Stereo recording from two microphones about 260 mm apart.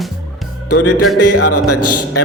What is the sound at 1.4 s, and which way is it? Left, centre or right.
Speech, left.